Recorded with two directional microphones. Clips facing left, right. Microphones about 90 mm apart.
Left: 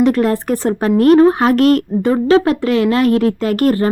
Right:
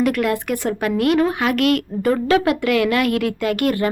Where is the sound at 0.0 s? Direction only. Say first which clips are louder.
Left 5 dB; 30° left (ahead or behind).